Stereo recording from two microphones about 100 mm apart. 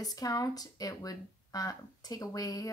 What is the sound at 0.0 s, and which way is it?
Speech, 40° left (ahead or behind).